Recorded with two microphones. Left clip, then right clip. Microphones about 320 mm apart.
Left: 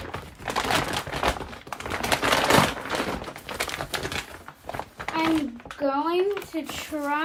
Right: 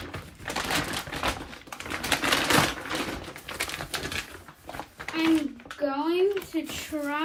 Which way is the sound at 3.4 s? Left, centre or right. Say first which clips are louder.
Left 3 dB; left.